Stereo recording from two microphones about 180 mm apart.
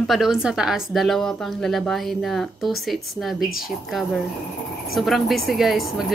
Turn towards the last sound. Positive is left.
turn(degrees=0)  # may be behind; listen again after turning